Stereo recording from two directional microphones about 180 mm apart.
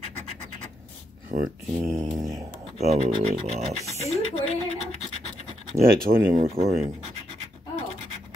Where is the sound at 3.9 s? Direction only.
35° left (ahead or behind).